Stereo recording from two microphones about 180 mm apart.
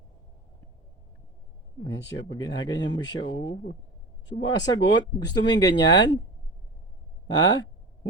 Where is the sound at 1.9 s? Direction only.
20° left (ahead or behind).